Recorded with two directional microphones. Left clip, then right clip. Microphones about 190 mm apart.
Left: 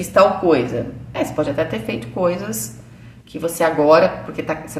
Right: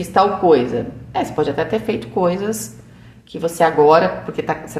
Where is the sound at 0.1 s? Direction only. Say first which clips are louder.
Even; 35° right (ahead or behind).